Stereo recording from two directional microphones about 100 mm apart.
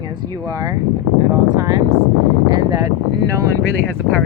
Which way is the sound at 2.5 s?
40° right (ahead or behind).